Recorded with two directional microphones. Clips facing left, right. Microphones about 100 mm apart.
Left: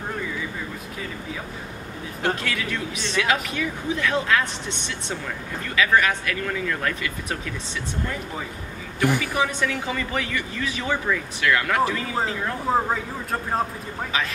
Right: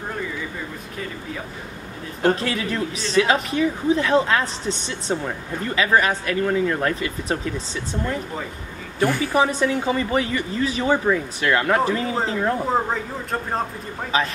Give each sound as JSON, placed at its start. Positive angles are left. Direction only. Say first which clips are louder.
{"t": 2.2, "sound": "speech", "louder": "right 5 dB", "side_deg": -35}
{"t": 9.2, "sound": "speech", "louder": "right 5 dB", "side_deg": -20}
{"t": 12.9, "sound": "speech", "louder": "right 1 dB", "side_deg": 5}
{"t": 14.1, "sound": "speech", "louder": "right 5 dB", "side_deg": -35}